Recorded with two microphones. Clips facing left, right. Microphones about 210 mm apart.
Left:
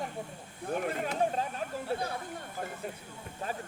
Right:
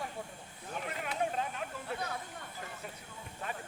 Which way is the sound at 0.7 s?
50° left (ahead or behind).